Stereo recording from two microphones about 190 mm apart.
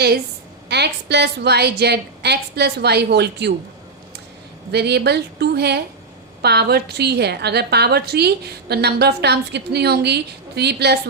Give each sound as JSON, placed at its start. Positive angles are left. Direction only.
{"t": 0.7, "sound": "a woman's voice", "side_deg": -60}
{"t": 4.7, "sound": "a woman's voice", "side_deg": -60}